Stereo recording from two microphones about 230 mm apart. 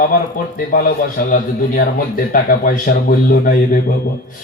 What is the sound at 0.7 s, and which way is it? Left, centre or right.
Speech, left.